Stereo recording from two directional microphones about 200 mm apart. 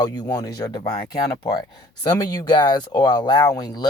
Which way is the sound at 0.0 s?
20° left (ahead or behind).